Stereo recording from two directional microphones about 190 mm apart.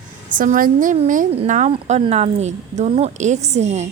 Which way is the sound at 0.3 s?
45° right (ahead or behind).